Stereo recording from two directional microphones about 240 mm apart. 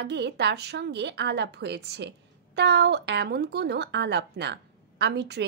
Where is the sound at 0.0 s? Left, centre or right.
Right.